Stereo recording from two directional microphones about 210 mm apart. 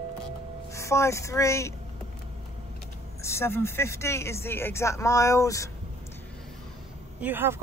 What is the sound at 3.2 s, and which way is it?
Speech, 10° left (ahead or behind).